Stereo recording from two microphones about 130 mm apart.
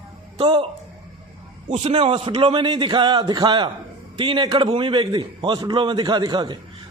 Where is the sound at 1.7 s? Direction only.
50° right (ahead or behind).